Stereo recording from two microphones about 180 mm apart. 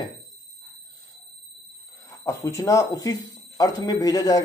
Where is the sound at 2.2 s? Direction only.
15° left (ahead or behind).